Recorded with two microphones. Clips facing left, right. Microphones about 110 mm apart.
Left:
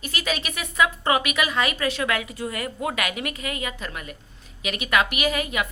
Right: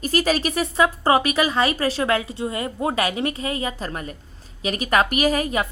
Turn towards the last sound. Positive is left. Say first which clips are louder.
# right 4 dB
turn(degrees=-35)  # may be behind; listen again after turning